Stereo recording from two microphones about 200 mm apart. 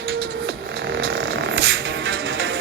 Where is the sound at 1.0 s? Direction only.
60° right (ahead or behind).